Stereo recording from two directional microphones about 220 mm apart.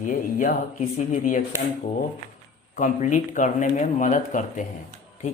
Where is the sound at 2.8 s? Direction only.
35° left (ahead or behind).